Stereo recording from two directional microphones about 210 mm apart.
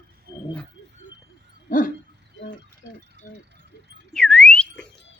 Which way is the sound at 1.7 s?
40° left (ahead or behind).